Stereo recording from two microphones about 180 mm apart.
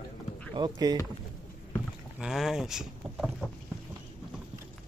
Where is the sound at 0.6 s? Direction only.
25° right (ahead or behind).